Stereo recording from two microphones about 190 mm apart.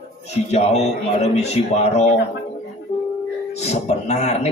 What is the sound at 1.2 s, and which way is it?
Speech, 35° left (ahead or behind).